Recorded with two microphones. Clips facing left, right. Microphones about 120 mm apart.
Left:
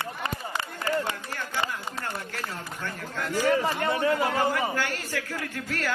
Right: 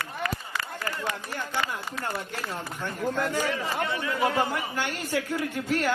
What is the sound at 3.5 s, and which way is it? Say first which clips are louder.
Speech: left 5 dB; 45° left (ahead or behind).